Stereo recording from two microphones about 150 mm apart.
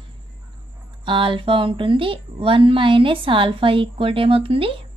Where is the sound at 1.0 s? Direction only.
35° right (ahead or behind).